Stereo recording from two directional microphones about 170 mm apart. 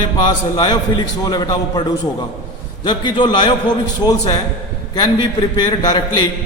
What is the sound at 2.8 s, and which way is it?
Speech, 25° left (ahead or behind).